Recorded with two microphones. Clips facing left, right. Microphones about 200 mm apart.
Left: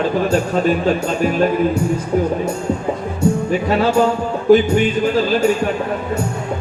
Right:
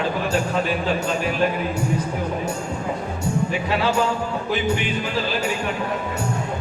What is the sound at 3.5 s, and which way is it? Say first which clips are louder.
Speech: left 6 dB; 45° left (ahead or behind).